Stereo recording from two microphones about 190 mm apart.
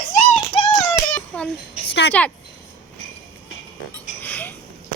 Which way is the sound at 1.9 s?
65° left (ahead or behind).